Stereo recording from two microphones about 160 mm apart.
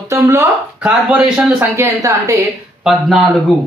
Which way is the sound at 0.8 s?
5° right (ahead or behind).